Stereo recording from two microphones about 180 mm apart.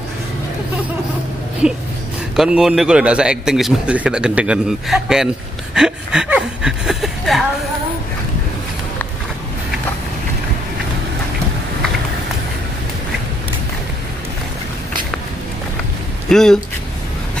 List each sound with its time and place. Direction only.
1.6 s a man's voice: centre (ahead or behind)
16.3 s speech: 5° left (ahead or behind)